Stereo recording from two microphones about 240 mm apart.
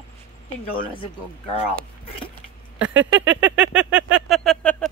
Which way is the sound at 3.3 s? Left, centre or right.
Centre.